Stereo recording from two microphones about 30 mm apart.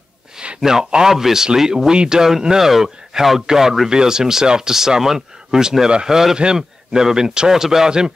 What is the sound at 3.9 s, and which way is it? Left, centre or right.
Speech, right.